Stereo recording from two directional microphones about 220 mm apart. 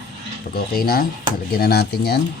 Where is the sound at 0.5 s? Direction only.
45° left (ahead or behind).